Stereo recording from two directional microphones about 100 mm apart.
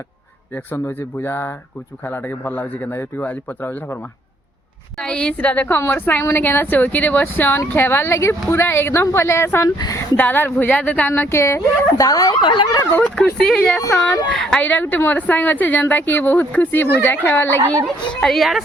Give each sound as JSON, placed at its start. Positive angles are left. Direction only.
{"t": 0.5, "sound": "a woman's voice", "side_deg": 20}
{"t": 4.9, "sound": "a woman's voice", "side_deg": 10}
{"t": 9.6, "sound": "speech", "side_deg": 40}
{"t": 10.2, "sound": "speech", "side_deg": 20}
{"t": 11.3, "sound": "speech", "side_deg": 30}
{"t": 12.9, "sound": "speech", "side_deg": 15}
{"t": 13.4, "sound": "speech", "side_deg": 5}
{"t": 14.6, "sound": "a woman's voice", "side_deg": 20}
{"t": 18.1, "sound": "speech", "side_deg": 5}